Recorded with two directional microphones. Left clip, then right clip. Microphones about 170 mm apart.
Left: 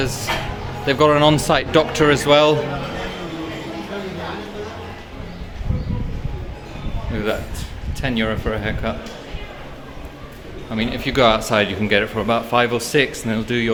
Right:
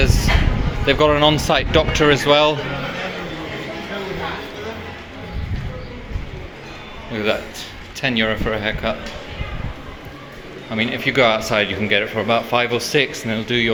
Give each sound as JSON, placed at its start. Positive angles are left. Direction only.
{"t": 0.0, "sound": "speech", "side_deg": 15}
{"t": 7.1, "sound": "speech", "side_deg": 10}
{"t": 10.8, "sound": "speech", "side_deg": 20}